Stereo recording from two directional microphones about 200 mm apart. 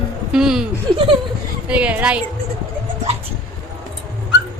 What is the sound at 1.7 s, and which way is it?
Speech, 5° right (ahead or behind).